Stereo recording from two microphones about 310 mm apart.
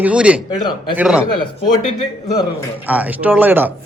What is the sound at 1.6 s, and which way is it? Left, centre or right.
Speech, left.